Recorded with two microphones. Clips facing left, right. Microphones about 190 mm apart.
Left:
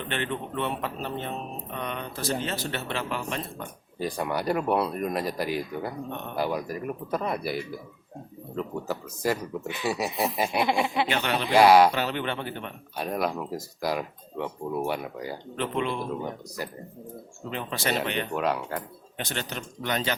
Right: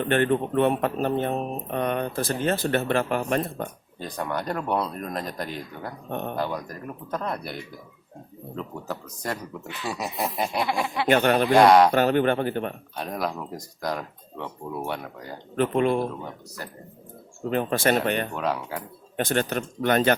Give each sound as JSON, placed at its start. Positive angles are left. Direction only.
{"t": 0.0, "sound": "speech", "side_deg": -50}
{"t": 3.9, "sound": "speech", "side_deg": 10}
{"t": 6.1, "sound": "speech", "side_deg": -45}
{"t": 6.3, "sound": "speech", "side_deg": 10}
{"t": 10.6, "sound": "speech", "side_deg": 20}
{"t": 11.1, "sound": "speech", "side_deg": -50}
{"t": 11.5, "sound": "speech", "side_deg": 5}
{"t": 11.9, "sound": "speech", "side_deg": -50}
{"t": 13.0, "sound": "speech", "side_deg": 0}
{"t": 15.5, "sound": "speech", "side_deg": -45}
{"t": 17.5, "sound": "speech", "side_deg": -50}
{"t": 18.3, "sound": "speech", "side_deg": 0}
{"t": 19.1, "sound": "speech", "side_deg": -50}